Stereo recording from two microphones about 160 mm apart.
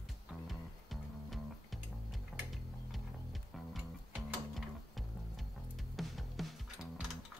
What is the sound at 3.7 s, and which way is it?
Music, centre (ahead or behind).